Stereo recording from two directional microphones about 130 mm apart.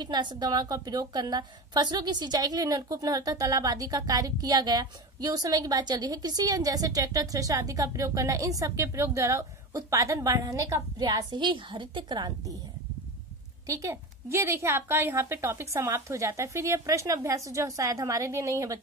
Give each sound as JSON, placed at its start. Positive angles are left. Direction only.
{"t": 0.0, "sound": "a woman's voice", "side_deg": -35}
{"t": 13.7, "sound": "a woman's voice", "side_deg": -25}